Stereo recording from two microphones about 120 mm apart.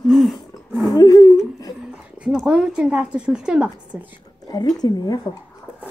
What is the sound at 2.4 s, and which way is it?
A woman's voice, 10° right (ahead or behind).